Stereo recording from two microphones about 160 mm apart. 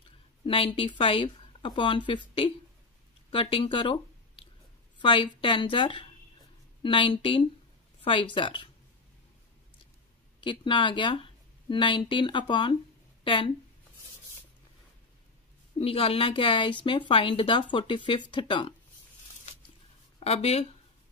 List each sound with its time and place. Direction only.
0.5 s speech: 35° left (ahead or behind)
10.4 s speech: 30° left (ahead or behind)
15.8 s speech: 35° left (ahead or behind)
20.2 s speech: 40° left (ahead or behind)